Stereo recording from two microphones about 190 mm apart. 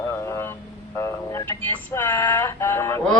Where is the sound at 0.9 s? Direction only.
15° left (ahead or behind).